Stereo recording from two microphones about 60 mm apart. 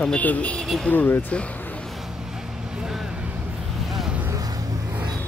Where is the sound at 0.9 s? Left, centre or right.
Left.